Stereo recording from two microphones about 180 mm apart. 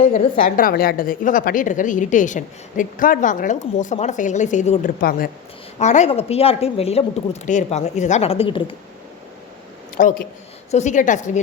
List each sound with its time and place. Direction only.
0.4 s a woman's voice: 50° left (ahead or behind)
4.9 s a woman's voice: 55° left (ahead or behind)
5.8 s speech: 40° left (ahead or behind)
10.0 s a woman's voice: 45° left (ahead or behind)